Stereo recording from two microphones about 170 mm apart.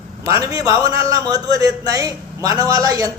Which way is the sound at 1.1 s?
20° right (ahead or behind).